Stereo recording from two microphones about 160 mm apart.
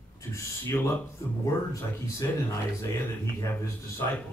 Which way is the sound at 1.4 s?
20° left (ahead or behind).